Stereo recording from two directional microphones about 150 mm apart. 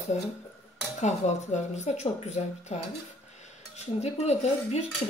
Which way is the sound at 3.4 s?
45° left (ahead or behind).